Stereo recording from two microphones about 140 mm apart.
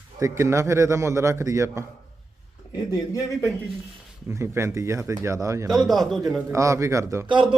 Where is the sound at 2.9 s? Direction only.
25° left (ahead or behind).